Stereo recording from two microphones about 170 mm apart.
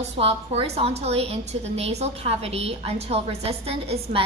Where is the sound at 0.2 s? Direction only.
35° right (ahead or behind).